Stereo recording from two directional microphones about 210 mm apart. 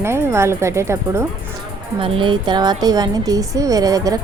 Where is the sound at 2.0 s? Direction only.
25° right (ahead or behind).